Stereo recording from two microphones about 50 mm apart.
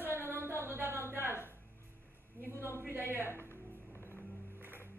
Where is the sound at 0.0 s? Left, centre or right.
Right.